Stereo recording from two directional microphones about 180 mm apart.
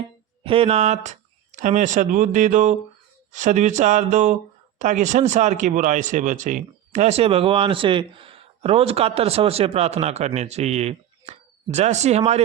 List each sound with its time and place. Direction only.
0.4 s speech: 30° right (ahead or behind)